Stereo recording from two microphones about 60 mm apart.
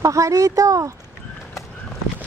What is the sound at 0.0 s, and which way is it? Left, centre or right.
Speech, right.